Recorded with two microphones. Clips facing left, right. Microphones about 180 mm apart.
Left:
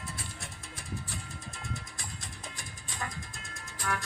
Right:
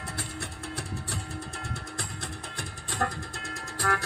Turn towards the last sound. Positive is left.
turn(degrees=-65)  # may be behind; listen again after turning